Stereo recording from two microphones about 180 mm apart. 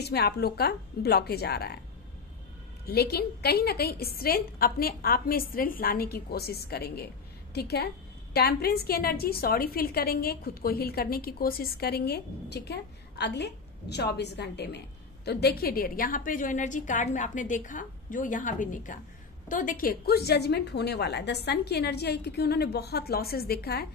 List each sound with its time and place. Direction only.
0.0 s a woman's voice: 65° left (ahead or behind)
2.9 s a woman's voice: 60° left (ahead or behind)